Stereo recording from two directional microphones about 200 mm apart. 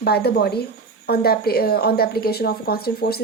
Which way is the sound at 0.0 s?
55° left (ahead or behind).